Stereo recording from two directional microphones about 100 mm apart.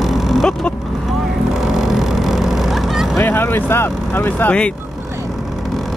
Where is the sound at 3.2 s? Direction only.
20° left (ahead or behind).